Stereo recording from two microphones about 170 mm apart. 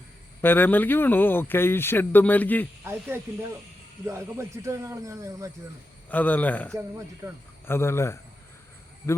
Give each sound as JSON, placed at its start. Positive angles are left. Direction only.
{"t": 0.4, "sound": "speech", "side_deg": 10}
{"t": 2.8, "sound": "speech", "side_deg": -15}
{"t": 6.1, "sound": "speech", "side_deg": 10}
{"t": 7.2, "sound": "speech", "side_deg": -20}
{"t": 7.7, "sound": "speech", "side_deg": 15}